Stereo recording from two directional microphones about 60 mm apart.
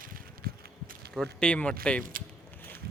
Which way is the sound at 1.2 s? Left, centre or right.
Centre.